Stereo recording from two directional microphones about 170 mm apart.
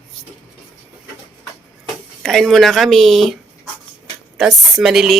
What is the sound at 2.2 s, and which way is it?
A woman's voice, centre (ahead or behind).